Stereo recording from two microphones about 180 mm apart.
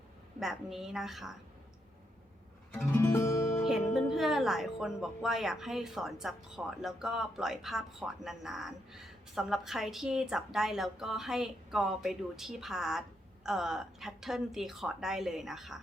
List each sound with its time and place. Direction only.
0.3 s speech: centre (ahead or behind)
2.7 s music: 15° left (ahead or behind)
3.9 s speech: centre (ahead or behind)